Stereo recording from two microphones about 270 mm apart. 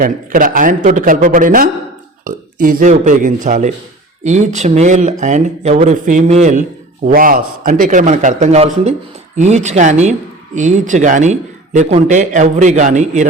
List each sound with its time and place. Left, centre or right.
0.0 s a man's voice: right